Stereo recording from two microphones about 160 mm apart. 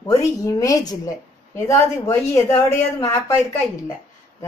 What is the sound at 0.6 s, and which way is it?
A woman's voice, 25° left (ahead or behind).